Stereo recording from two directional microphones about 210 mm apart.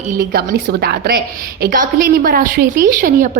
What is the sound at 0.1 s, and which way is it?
A woman's voice, 45° right (ahead or behind).